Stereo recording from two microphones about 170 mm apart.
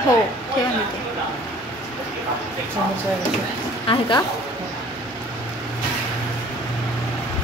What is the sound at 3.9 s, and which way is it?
Speech, 30° left (ahead or behind).